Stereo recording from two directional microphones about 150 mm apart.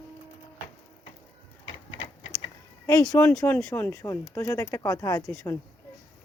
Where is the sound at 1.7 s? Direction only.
35° left (ahead or behind).